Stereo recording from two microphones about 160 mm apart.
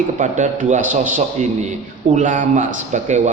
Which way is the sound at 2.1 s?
50° right (ahead or behind).